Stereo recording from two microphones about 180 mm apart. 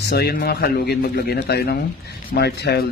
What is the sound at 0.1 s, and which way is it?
Speech, 60° left (ahead or behind).